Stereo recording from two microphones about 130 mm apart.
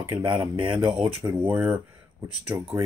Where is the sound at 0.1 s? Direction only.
40° right (ahead or behind).